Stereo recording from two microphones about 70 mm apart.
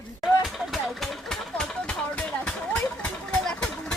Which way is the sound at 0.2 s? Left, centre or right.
Centre.